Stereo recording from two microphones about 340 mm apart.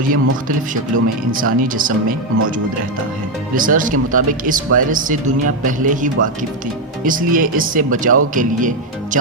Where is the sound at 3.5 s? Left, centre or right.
Right.